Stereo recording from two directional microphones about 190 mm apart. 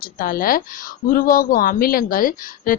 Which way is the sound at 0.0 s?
50° left (ahead or behind).